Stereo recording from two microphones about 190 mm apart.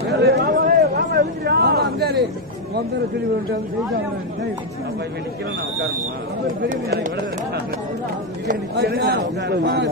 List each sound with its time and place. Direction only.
0.1 s a sound: 60° right (ahead or behind)
1.1 s vehicle: 60° right (ahead or behind)
8.7 s a man's voice: 55° right (ahead or behind)